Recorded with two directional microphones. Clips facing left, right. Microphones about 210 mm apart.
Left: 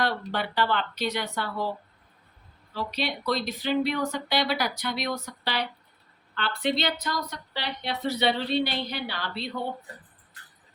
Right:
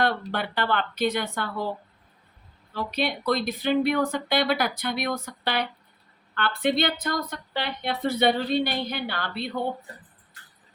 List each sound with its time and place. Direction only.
0.0 s a woman's voice: 55° right (ahead or behind)
2.7 s a woman's voice: 50° right (ahead or behind)